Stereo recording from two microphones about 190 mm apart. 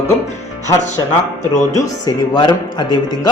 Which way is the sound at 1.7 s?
20° left (ahead or behind).